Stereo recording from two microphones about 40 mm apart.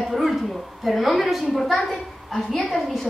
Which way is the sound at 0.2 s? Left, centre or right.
Centre.